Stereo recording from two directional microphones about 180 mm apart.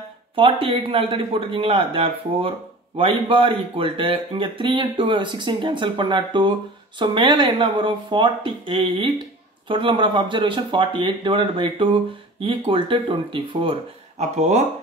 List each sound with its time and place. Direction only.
0.4 s speech: 30° right (ahead or behind)